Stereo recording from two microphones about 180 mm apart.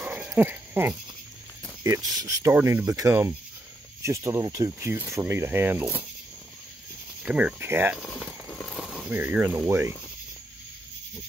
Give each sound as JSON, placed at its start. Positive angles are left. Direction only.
{"t": 0.0, "sound": "goat", "side_deg": -5}
{"t": 1.8, "sound": "speech", "side_deg": -20}
{"t": 7.2, "sound": "speech", "side_deg": -5}
{"t": 8.0, "sound": "a sound", "side_deg": 5}
{"t": 9.1, "sound": "speech", "side_deg": -10}